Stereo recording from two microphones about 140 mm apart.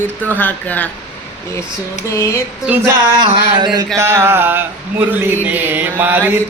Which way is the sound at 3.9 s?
20° right (ahead or behind).